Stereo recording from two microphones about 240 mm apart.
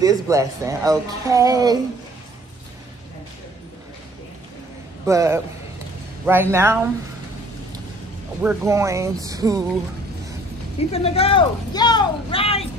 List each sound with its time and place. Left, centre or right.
0.0 s speech: centre
5.0 s speech: centre
8.4 s speech: centre
10.9 s speech: left